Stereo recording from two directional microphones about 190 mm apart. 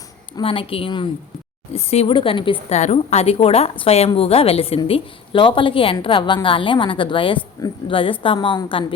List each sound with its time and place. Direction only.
0.3 s speech: 30° left (ahead or behind)